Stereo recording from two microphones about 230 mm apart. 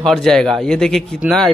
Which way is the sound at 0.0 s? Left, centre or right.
Centre.